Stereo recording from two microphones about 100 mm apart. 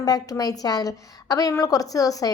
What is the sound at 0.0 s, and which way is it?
A woman's voice, 40° left (ahead or behind).